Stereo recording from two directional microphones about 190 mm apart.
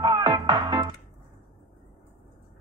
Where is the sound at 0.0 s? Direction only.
25° right (ahead or behind).